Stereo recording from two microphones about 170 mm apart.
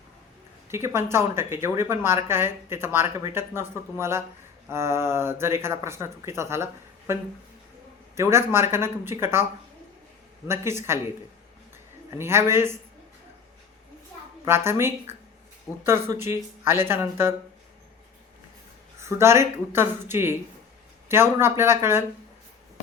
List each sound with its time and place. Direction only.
0.7 s a woman's voice: 15° right (ahead or behind)
10.5 s a woman's voice: 15° right (ahead or behind)
12.1 s a woman's voice: 15° right (ahead or behind)
14.4 s a woman's voice: 15° right (ahead or behind)
18.9 s a woman's voice: 15° right (ahead or behind)